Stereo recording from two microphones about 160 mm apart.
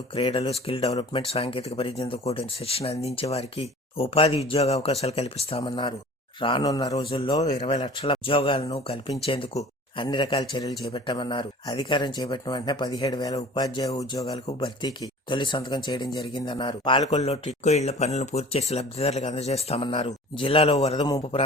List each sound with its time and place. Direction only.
0.2 s speech: 35° left (ahead or behind)
7.0 s a man's voice: 35° left (ahead or behind)
7.7 s speech: 30° left (ahead or behind)
14.3 s speech: 40° left (ahead or behind)